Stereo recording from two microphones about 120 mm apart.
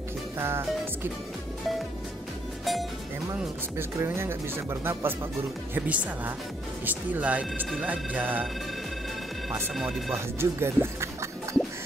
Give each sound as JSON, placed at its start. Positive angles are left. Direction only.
{"t": 0.4, "sound": "speech", "side_deg": -20}
{"t": 2.6, "sound": "music", "side_deg": 0}
{"t": 3.7, "sound": "speech", "side_deg": -20}
{"t": 9.5, "sound": "speech", "side_deg": -5}
{"t": 10.1, "sound": "speech", "side_deg": -20}